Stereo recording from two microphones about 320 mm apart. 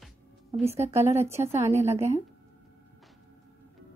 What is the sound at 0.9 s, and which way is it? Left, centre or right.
Speech, centre.